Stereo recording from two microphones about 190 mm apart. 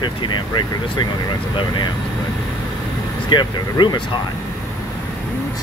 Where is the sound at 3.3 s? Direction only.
25° left (ahead or behind).